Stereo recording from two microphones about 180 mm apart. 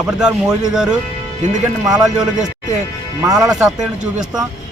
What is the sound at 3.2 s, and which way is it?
Speech, 20° right (ahead or behind).